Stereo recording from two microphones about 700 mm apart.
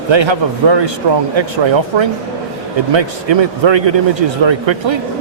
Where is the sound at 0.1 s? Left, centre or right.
Right.